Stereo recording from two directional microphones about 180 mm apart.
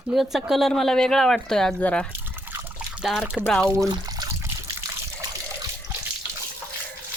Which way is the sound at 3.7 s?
20° right (ahead or behind).